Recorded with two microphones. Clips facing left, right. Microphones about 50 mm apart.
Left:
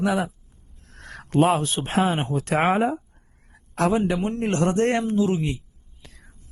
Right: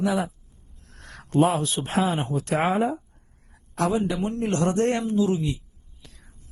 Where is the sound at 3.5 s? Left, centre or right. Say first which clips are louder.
Left 2 dB; left.